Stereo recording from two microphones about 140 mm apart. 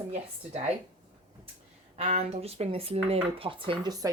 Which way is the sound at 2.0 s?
50° right (ahead or behind).